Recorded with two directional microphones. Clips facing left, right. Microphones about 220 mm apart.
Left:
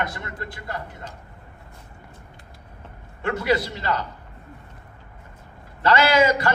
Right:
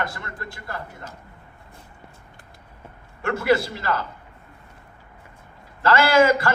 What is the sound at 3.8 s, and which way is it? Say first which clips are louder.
Speech: even; 20° left (ahead or behind).